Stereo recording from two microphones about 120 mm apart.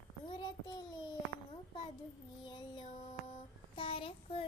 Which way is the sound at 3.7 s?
45° left (ahead or behind).